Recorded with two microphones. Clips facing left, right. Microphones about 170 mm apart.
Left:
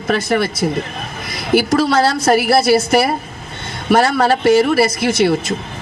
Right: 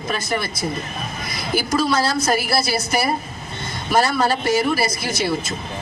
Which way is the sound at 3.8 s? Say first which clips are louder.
Left 5 dB; 65° left (ahead or behind).